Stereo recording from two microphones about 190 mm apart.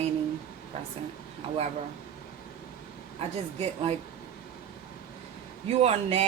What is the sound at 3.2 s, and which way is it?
Speech, 30° right (ahead or behind).